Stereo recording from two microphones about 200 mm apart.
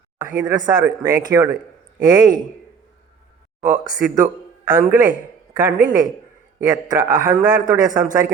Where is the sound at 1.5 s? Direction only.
45° right (ahead or behind).